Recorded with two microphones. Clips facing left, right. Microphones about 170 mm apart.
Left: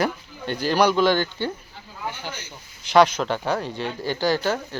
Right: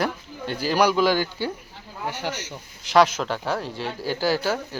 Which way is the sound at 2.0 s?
75° right (ahead or behind).